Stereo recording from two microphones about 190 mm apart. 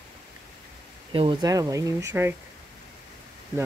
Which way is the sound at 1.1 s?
25° right (ahead or behind).